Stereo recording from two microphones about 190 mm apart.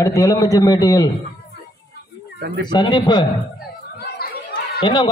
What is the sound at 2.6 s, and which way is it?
Speech, 25° left (ahead or behind).